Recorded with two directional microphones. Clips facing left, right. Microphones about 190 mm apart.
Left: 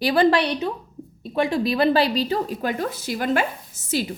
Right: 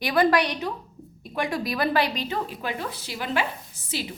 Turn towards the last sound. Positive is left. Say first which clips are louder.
# left 7 dB
turn(degrees=45)  # may be behind; listen again after turning